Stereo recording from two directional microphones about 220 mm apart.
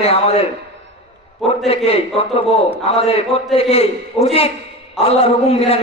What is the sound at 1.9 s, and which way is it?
A man's voice, 25° left (ahead or behind).